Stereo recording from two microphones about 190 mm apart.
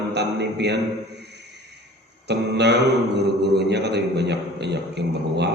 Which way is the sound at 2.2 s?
60° right (ahead or behind).